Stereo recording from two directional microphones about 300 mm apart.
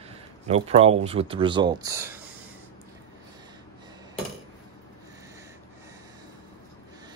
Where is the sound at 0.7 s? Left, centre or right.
Centre.